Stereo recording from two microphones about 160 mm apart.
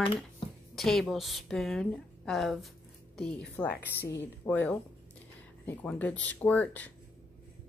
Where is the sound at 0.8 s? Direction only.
Centre (ahead or behind).